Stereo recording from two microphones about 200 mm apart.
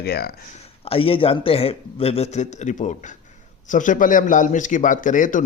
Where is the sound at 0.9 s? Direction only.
25° left (ahead or behind).